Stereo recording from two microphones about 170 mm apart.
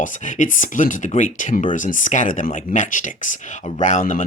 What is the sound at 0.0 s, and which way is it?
Speech, 50° left (ahead or behind).